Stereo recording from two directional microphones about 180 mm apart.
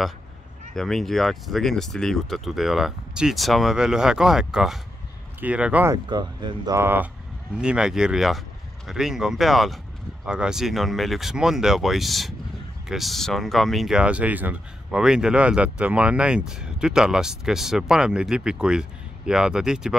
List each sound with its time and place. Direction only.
0.7 s speech: centre (ahead or behind)
6.0 s speech: 25° right (ahead or behind); by 20.0 s 5° right (ahead or behind)